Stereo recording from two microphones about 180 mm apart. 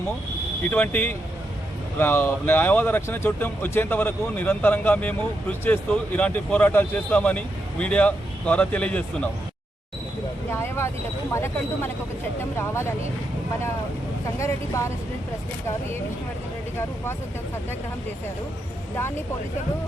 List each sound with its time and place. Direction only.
0.6 s speech: 10° left (ahead or behind)
10.5 s speech: 15° left (ahead or behind)
14.3 s speech: 15° left (ahead or behind)
18.9 s speech: 15° left (ahead or behind)